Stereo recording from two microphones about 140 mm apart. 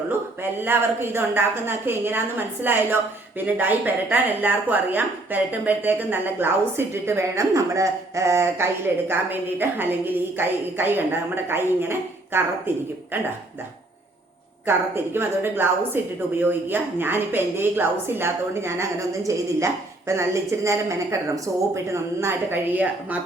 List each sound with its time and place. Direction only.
0.6 s a woman's voice: 15° right (ahead or behind)
14.7 s a woman's voice: 15° right (ahead or behind)